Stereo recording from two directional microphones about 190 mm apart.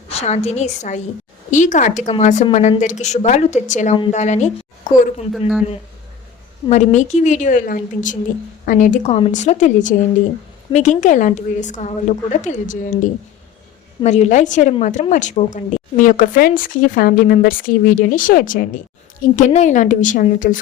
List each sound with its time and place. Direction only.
0.1 s a woman's voice: 35° left (ahead or behind)
6.7 s a woman's voice: 40° left (ahead or behind)